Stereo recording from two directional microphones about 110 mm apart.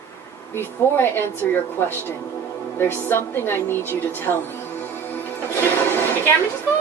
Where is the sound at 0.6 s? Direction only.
20° left (ahead or behind).